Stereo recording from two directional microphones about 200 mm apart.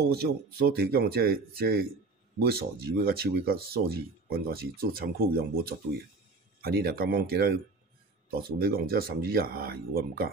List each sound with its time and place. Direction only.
0.1 s speech: 50° right (ahead or behind)